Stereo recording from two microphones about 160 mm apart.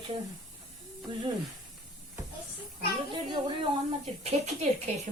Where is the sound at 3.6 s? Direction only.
40° right (ahead or behind).